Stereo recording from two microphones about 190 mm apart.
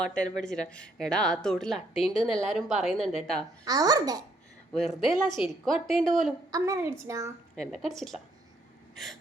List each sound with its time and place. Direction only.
0.0 s speech: 5° left (ahead or behind)
3.7 s a child's voice: 20° right (ahead or behind)
4.8 s speech: centre (ahead or behind)
6.5 s a woman's voice: 15° right (ahead or behind)
7.5 s speech: 5° left (ahead or behind)